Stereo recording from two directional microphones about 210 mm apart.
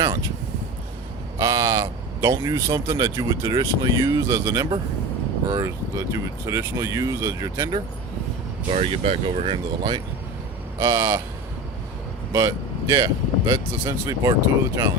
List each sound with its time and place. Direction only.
1.4 s speech: 15° right (ahead or behind)
8.7 s speech: 30° right (ahead or behind)
12.3 s speech: 15° right (ahead or behind)